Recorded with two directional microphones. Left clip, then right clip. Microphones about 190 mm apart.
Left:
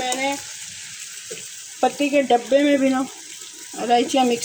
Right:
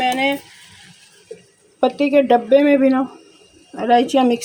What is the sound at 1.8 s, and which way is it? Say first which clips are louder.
Speech: right 4 dB; 15° right (ahead or behind).